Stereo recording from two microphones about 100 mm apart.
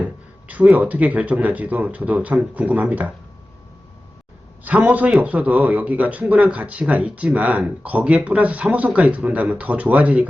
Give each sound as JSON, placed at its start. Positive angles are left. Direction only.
{"t": 0.0, "sound": "a man's voice", "side_deg": -15}
{"t": 4.6, "sound": "a man's voice", "side_deg": -15}